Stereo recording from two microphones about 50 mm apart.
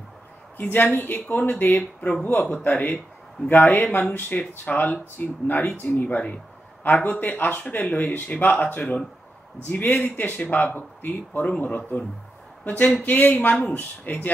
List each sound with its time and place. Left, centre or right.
0.6 s speech: left
1.5 s speech: left
2.2 s speech: left
11.4 s speech: left